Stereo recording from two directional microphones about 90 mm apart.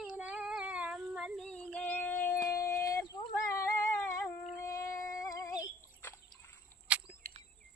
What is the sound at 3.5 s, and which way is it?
Humming, 30° left (ahead or behind).